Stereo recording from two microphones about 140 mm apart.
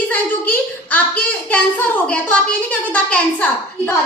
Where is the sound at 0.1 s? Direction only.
10° left (ahead or behind).